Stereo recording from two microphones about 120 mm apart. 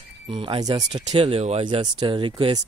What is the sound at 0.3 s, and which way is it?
Speech, 45° right (ahead or behind).